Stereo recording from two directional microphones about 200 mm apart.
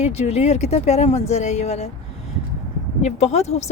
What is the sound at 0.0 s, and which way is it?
Speech, 30° left (ahead or behind).